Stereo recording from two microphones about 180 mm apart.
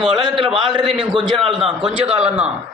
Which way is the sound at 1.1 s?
25° right (ahead or behind).